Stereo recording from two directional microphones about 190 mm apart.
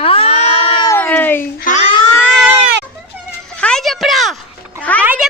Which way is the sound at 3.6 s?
5° left (ahead or behind).